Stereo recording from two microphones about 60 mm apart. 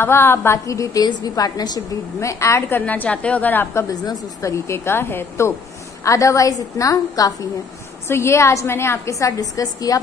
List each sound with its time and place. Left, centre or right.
0.0 s a woman's voice: left
0.7 s a woman's voice: left
2.1 s a woman's voice: left
2.8 s a woman's voice: left
3.9 s a woman's voice: left
4.7 s a woman's voice: left
6.0 s a woman's voice: left
8.1 s a woman's voice: left